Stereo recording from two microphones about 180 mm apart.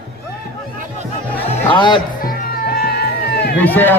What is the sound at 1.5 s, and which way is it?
Speech, 25° left (ahead or behind).